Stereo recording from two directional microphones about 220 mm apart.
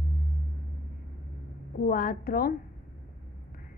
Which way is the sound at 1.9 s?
40° left (ahead or behind).